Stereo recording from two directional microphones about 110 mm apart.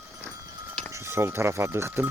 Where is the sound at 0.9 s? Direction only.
25° right (ahead or behind).